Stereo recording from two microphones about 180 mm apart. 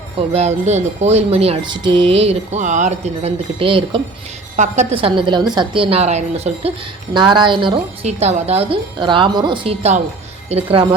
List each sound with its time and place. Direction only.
0.3 s speech: 40° right (ahead or behind)
4.5 s speech: 40° right (ahead or behind)
7.1 s a woman's voice: 25° right (ahead or behind)